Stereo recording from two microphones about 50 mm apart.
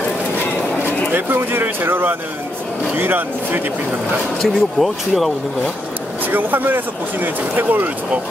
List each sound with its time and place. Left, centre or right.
1.1 s speech: right
4.4 s speech: centre
6.3 s speech: right